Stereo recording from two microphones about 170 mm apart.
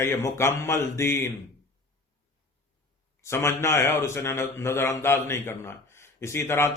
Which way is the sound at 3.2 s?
15° left (ahead or behind).